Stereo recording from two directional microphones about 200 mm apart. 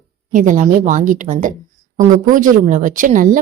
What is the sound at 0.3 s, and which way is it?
A woman's voice, 40° right (ahead or behind).